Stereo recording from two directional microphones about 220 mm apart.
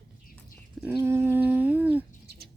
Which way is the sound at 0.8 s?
10° right (ahead or behind).